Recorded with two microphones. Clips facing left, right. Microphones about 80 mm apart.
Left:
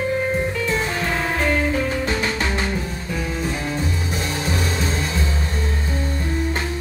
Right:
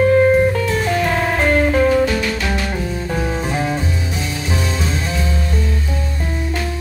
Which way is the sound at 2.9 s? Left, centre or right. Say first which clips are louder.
Right 5 dB; right.